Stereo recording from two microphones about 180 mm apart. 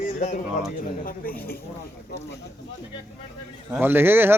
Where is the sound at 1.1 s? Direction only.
55° left (ahead or behind).